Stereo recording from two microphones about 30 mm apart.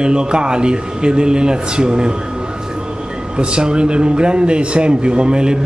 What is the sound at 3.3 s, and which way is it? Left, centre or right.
A man's voice, right.